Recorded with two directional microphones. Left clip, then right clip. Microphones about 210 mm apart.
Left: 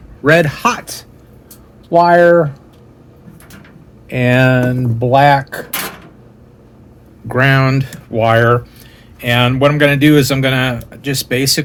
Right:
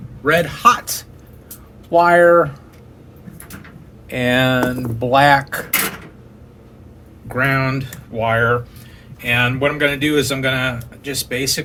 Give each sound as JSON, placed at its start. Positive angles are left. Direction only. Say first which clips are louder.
{"t": 0.2, "sound": "a man's voice", "louder": "left 4 dB", "side_deg": 50}
{"t": 1.9, "sound": "speech", "louder": "left 3 dB", "side_deg": 15}
{"t": 4.1, "sound": "speech", "louder": "left 4 dB", "side_deg": 30}
{"t": 7.3, "sound": "speech", "louder": "left 5 dB", "side_deg": 50}